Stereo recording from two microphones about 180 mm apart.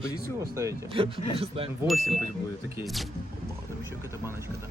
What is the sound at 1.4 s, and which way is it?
Speech, 30° right (ahead or behind).